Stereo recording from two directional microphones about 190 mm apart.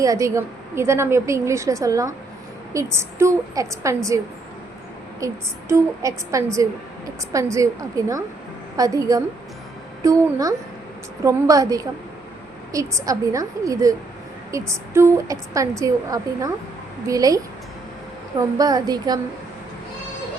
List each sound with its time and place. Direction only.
0.0 s a woman's voice: 15° right (ahead or behind)
5.2 s a woman's voice: 15° right (ahead or behind)